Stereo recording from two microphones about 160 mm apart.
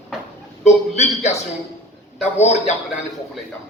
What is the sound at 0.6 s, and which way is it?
A man's voice, 45° left (ahead or behind).